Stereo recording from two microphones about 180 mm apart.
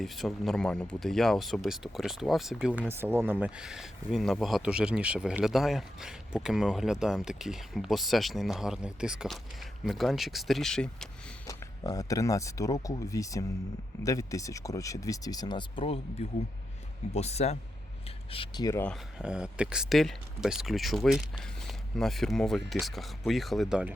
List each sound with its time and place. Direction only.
0.0 s speech: centre (ahead or behind)
11.4 s speech: 20° left (ahead or behind)
19.2 s speech: 5° right (ahead or behind)